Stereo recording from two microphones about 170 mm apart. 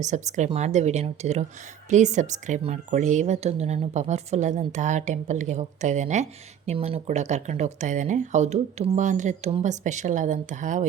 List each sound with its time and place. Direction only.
0.0 s speech: 45° right (ahead or behind)